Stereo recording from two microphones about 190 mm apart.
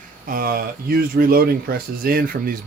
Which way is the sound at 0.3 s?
50° right (ahead or behind).